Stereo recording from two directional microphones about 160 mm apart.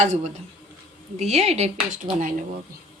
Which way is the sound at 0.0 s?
45° right (ahead or behind).